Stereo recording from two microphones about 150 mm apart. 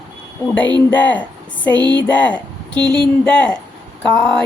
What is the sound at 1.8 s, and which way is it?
Speech, 30° right (ahead or behind).